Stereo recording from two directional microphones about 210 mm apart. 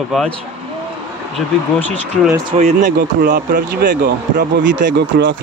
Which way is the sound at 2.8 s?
45° right (ahead or behind).